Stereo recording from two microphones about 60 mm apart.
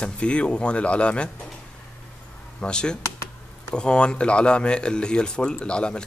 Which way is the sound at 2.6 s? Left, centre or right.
Centre.